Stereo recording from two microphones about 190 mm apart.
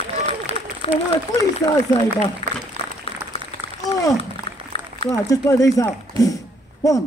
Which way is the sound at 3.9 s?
15° left (ahead or behind).